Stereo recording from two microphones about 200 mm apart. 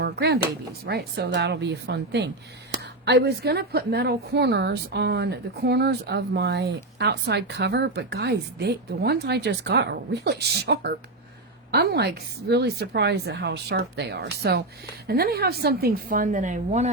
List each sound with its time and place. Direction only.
0.0 s a woman's voice: 55° right (ahead or behind); by 16.9 s 35° right (ahead or behind)